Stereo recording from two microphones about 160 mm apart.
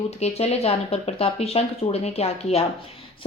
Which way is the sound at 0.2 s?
40° left (ahead or behind).